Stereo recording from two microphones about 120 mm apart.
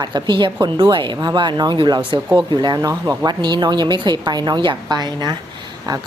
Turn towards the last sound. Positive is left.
turn(degrees=-35)  # may be behind; listen again after turning